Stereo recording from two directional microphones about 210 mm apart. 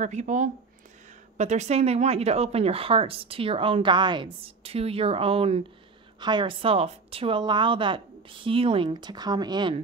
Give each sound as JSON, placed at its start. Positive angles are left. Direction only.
{"t": 0.0, "sound": "speech", "side_deg": -35}